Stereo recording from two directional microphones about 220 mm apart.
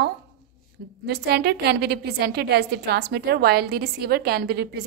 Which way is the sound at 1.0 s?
50° right (ahead or behind).